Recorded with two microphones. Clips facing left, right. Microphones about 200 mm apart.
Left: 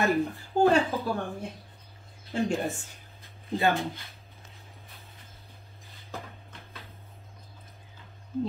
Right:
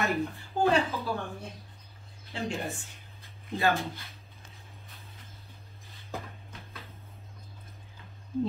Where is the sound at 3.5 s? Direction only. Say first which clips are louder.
Left 2 dB; 15° left (ahead or behind).